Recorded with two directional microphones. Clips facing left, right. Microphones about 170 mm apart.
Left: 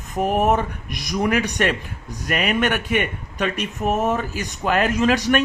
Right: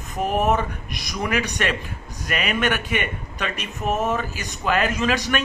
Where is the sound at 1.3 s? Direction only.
50° left (ahead or behind).